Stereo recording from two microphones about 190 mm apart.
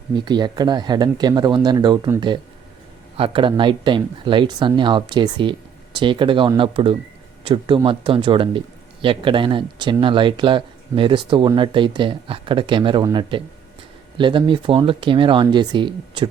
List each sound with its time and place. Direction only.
0.3 s speech: 20° right (ahead or behind)